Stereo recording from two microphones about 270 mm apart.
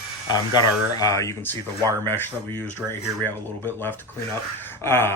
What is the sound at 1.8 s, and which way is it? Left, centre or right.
Speech, centre.